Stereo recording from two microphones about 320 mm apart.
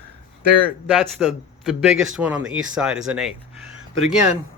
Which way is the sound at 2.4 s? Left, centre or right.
Right.